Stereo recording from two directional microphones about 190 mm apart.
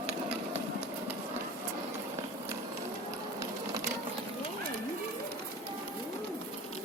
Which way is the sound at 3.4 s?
20° right (ahead or behind).